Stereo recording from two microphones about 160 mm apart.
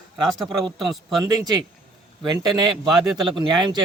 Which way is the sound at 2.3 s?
25° right (ahead or behind).